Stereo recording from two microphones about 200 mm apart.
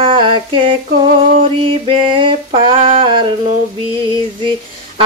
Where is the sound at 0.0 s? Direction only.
25° right (ahead or behind).